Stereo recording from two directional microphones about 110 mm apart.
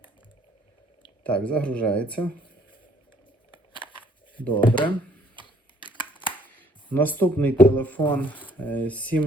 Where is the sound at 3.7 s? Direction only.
50° left (ahead or behind).